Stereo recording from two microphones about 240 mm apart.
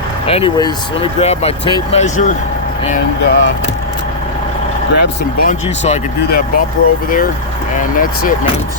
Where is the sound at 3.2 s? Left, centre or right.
Left.